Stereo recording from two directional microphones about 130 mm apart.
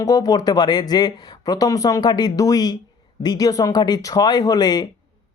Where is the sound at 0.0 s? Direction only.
25° left (ahead or behind).